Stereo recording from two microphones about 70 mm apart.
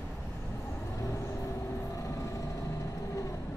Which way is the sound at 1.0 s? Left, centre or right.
Left.